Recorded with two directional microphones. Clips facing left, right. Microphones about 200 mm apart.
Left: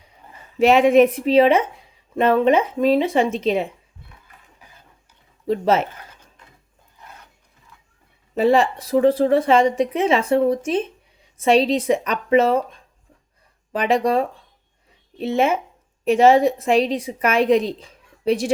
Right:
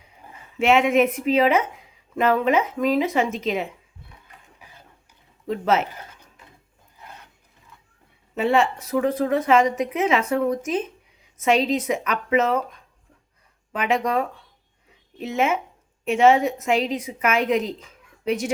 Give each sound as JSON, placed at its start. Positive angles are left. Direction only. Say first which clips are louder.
{"t": 0.5, "sound": "a woman's voice", "louder": "left 5 dB", "side_deg": 35}
{"t": 5.5, "sound": "a woman's voice", "louder": "left 3 dB", "side_deg": 35}
{"t": 8.4, "sound": "a woman's voice", "louder": "left 4 dB", "side_deg": 35}